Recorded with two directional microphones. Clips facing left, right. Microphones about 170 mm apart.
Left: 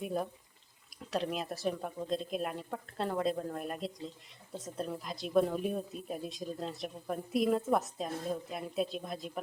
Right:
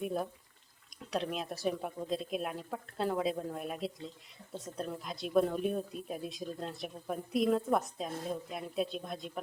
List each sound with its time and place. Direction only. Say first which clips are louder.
0.0 s speech: even; centre (ahead or behind)